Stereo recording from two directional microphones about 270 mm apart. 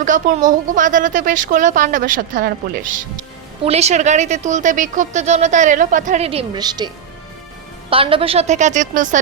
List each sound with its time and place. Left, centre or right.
0.0 s speech: right